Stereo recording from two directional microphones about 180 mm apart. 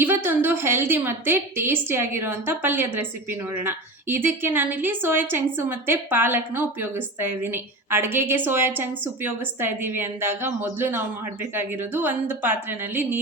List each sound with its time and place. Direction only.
0.0 s a woman's voice: 10° right (ahead or behind)